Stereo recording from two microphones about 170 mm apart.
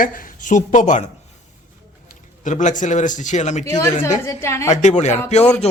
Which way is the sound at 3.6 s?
20° left (ahead or behind).